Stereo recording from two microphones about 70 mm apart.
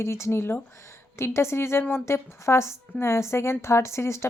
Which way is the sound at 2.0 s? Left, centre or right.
Left.